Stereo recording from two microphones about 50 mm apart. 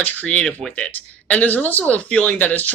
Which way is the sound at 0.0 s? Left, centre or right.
Left.